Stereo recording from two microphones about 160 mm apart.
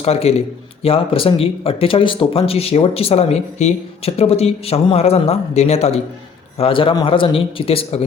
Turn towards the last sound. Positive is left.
turn(degrees=35)  # may be behind; listen again after turning